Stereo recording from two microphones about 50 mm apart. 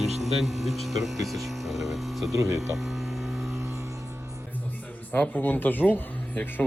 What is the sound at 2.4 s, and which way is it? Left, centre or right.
Speech, right.